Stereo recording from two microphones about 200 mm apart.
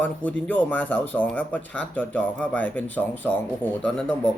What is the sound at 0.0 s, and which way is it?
Speech, 5° left (ahead or behind).